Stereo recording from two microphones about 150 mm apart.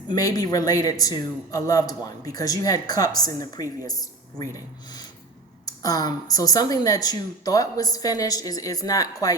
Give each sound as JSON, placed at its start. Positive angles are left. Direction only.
{"t": 0.1, "sound": "speech", "side_deg": 25}